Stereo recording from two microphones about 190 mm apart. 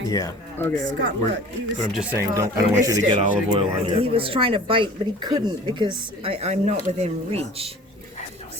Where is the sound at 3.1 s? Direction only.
30° right (ahead or behind).